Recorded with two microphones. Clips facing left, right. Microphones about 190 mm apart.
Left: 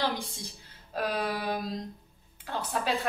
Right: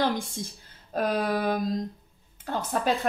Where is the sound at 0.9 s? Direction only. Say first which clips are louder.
Right 5 dB; 45° right (ahead or behind).